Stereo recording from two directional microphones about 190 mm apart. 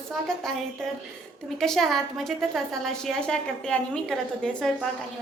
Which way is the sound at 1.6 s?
Centre (ahead or behind).